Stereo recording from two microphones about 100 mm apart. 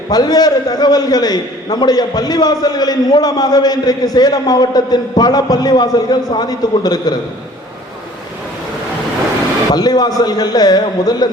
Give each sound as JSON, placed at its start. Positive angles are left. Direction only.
{"t": 0.1, "sound": "a man's voice", "side_deg": 40}
{"t": 9.7, "sound": "a man's voice", "side_deg": 40}